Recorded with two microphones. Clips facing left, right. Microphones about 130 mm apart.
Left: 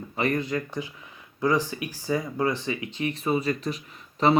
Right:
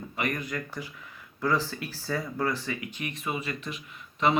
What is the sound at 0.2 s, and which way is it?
Speech, 30° left (ahead or behind).